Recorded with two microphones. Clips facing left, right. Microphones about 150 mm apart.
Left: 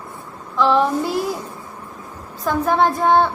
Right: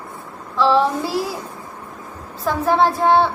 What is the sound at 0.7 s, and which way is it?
Child singing, 5° right (ahead or behind).